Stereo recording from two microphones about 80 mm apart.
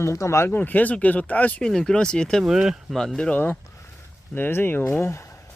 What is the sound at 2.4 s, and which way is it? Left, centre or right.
Speech, centre.